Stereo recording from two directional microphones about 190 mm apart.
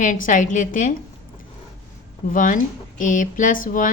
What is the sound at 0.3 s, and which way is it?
Speech, 40° left (ahead or behind).